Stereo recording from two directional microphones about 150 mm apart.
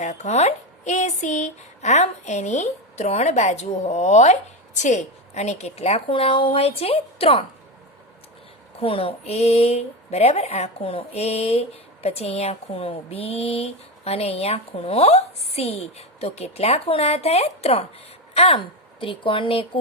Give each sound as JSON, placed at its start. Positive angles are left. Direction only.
{"t": 0.0, "sound": "speech", "side_deg": 50}
{"t": 8.8, "sound": "a woman's voice", "side_deg": 40}